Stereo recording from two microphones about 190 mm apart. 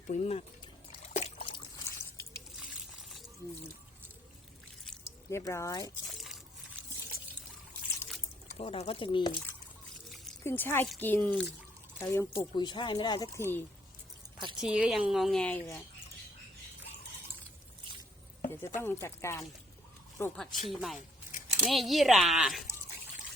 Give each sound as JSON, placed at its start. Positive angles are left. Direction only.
{"t": 0.1, "sound": "speech", "side_deg": 35}
{"t": 1.1, "sound": "liquid", "side_deg": 35}
{"t": 5.3, "sound": "speech", "side_deg": 15}
{"t": 6.1, "sound": "a sound", "side_deg": 0}
{"t": 8.5, "sound": "speech", "side_deg": 30}
{"t": 10.4, "sound": "speech", "side_deg": 10}
{"t": 14.6, "sound": "speech", "side_deg": -5}
{"t": 18.4, "sound": "a sound", "side_deg": 15}
{"t": 18.8, "sound": "speech", "side_deg": 10}
{"t": 20.3, "sound": "speech", "side_deg": 0}